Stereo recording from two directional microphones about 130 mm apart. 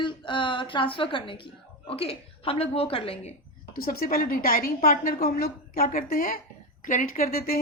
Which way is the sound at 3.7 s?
90° left.